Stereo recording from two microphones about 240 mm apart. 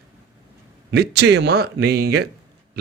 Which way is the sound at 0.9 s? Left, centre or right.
Right.